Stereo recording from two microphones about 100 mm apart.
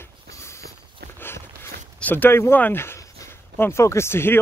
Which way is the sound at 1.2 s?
20° left (ahead or behind).